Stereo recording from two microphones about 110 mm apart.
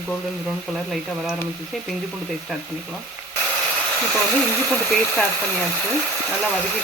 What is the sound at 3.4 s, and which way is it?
Hair dryer, 10° left (ahead or behind).